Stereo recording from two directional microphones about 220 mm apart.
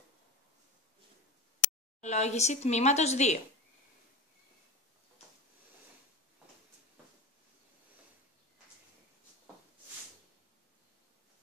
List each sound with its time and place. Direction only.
2.0 s a woman's voice: 30° left (ahead or behind)